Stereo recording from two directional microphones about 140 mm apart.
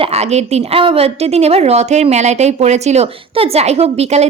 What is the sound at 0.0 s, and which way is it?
A woman's voice, 50° right (ahead or behind).